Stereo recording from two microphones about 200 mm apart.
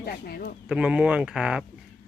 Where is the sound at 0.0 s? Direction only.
50° left (ahead or behind).